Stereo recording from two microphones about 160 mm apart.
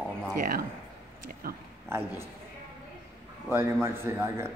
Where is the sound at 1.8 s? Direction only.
15° right (ahead or behind).